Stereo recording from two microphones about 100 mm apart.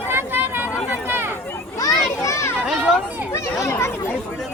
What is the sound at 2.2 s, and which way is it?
Children playing, 30° left (ahead or behind).